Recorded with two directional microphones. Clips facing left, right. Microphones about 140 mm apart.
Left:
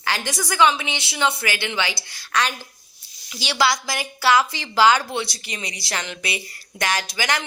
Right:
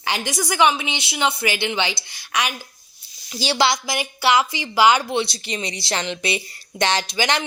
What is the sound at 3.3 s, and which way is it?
Speech, 35° right (ahead or behind).